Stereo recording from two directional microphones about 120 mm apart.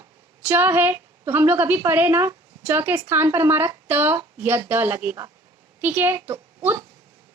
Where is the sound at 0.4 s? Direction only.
20° right (ahead or behind).